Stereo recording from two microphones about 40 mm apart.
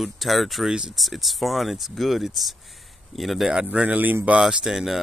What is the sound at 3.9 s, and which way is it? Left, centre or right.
Speech, right.